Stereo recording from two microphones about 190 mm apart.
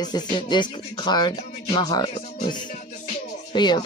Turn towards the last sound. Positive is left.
turn(degrees=25)  # may be behind; listen again after turning